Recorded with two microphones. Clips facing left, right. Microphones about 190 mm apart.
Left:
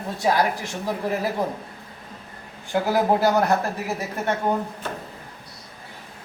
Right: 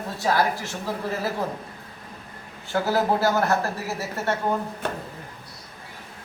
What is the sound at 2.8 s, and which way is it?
Speech, 15° left (ahead or behind).